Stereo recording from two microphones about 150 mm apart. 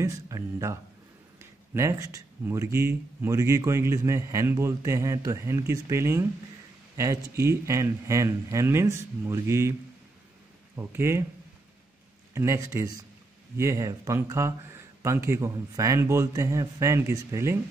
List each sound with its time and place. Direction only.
0.0 s speech: 20° right (ahead or behind)
10.8 s speech: 15° right (ahead or behind)
12.4 s speech: 20° right (ahead or behind)